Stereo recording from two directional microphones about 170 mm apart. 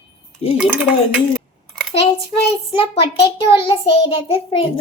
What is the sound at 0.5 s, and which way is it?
Dishes, 5° right (ahead or behind).